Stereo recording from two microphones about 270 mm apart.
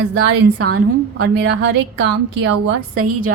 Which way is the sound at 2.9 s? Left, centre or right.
Right.